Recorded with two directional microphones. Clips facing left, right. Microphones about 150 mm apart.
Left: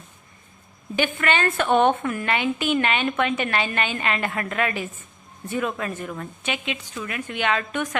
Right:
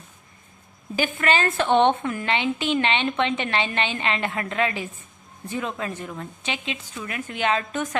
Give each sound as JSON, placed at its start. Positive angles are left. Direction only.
{"t": 0.9, "sound": "a woman's voice", "side_deg": -35}